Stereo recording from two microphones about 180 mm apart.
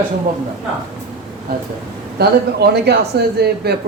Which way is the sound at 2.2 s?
65° right (ahead or behind).